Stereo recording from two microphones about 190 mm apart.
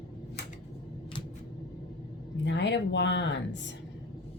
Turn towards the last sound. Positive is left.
turn(degrees=70)  # may be behind; listen again after turning